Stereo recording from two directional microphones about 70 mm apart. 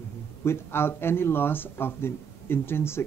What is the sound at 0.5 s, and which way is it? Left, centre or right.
Speech, left.